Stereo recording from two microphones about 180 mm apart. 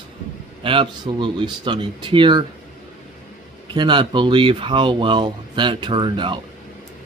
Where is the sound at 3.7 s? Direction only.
25° right (ahead or behind).